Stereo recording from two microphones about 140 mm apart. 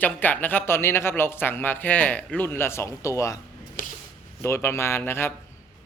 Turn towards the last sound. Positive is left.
turn(degrees=15)  # may be behind; listen again after turning